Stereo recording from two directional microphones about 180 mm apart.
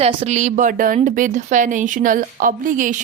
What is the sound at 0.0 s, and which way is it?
A woman's voice, 35° right (ahead or behind).